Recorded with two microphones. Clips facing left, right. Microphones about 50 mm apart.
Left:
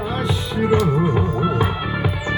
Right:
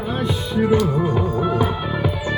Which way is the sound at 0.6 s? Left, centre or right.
Left.